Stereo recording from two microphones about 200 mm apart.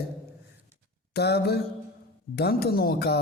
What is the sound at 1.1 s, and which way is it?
A man's voice, 55° left (ahead or behind).